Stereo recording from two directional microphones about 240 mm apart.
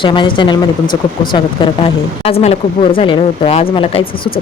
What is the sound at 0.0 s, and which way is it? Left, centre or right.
Speech, centre.